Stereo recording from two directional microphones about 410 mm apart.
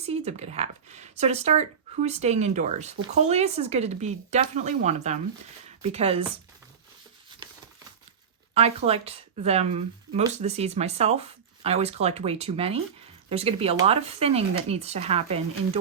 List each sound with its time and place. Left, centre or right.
0.0 s speech: centre
8.5 s speech: centre